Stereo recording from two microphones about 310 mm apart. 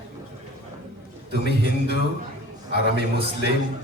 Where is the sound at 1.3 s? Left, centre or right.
Left.